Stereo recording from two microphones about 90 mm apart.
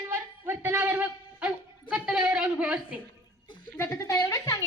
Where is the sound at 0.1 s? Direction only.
25° right (ahead or behind).